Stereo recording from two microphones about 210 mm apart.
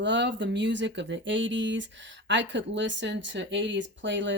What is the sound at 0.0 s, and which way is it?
Speech, 60° right (ahead or behind).